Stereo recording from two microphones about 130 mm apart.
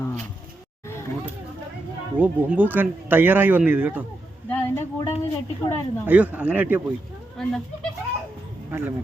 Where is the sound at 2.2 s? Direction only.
15° right (ahead or behind).